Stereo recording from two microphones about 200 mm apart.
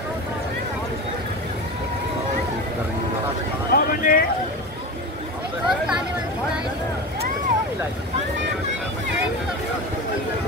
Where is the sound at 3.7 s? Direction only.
45° left (ahead or behind).